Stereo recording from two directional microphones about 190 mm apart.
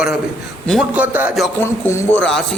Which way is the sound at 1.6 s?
15° left (ahead or behind).